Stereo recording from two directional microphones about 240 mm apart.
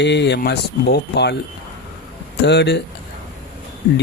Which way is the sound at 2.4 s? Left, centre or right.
Left.